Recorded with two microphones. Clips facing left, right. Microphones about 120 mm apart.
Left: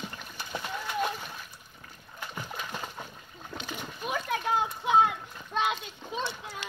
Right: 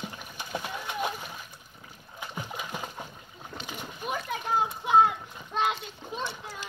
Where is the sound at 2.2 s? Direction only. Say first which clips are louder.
Right 1 dB; 15° right (ahead or behind).